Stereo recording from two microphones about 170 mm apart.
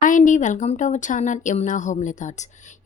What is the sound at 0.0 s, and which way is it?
A woman's voice, 50° left (ahead or behind).